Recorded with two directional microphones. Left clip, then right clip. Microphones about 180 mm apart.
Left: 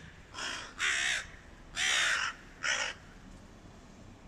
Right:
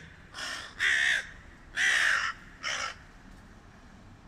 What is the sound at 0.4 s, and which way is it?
Crow, centre (ahead or behind).